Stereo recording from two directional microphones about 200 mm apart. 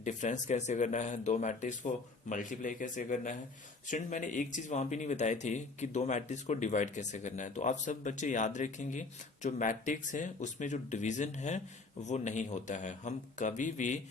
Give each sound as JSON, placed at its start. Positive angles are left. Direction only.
{"t": 0.0, "sound": "speech", "side_deg": 35}